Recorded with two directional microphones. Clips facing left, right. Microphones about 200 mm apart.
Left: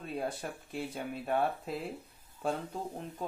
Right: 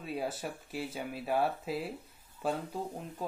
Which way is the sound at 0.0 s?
5° right (ahead or behind).